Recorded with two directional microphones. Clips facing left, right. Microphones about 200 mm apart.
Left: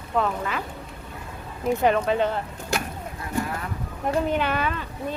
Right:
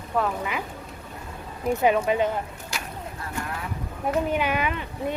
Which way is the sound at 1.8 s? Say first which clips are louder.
Even; 10° right (ahead or behind).